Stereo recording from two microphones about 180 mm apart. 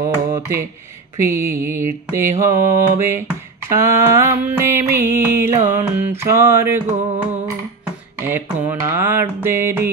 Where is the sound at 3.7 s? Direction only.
15° right (ahead or behind).